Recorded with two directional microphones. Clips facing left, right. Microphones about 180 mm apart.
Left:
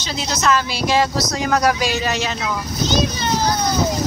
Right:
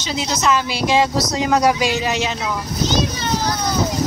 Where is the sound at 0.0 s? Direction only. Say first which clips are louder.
Right 1 dB; 15° right (ahead or behind).